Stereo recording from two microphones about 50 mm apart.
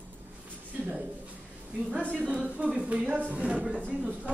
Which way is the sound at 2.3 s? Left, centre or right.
Centre.